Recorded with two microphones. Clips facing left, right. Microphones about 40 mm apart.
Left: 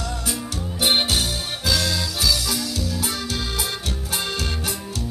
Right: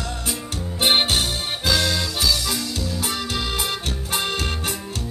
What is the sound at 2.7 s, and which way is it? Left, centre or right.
Music, right.